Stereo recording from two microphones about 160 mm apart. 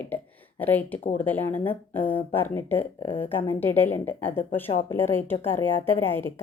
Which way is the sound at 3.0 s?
35° left (ahead or behind).